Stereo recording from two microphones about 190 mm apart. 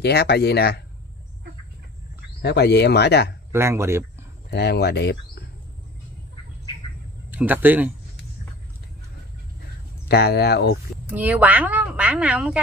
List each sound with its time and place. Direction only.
0.0 s speech: 60° left (ahead or behind)
2.4 s speech: 60° left (ahead or behind)
3.5 s speech: 15° right (ahead or behind)
4.5 s speech: 60° left (ahead or behind)
7.2 s speech: 10° right (ahead or behind)
10.0 s speech: 55° left (ahead or behind)
11.1 s a woman's voice: 10° right (ahead or behind)